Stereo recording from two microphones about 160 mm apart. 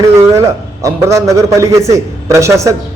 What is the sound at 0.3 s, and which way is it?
A man's voice, 20° right (ahead or behind).